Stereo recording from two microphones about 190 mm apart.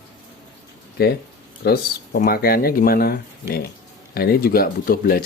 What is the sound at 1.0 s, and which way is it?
Speech, 55° left (ahead or behind).